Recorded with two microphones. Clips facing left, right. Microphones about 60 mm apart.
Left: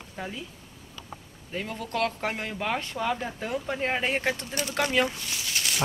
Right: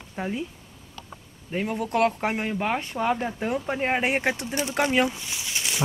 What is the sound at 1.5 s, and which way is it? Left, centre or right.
Speech, right.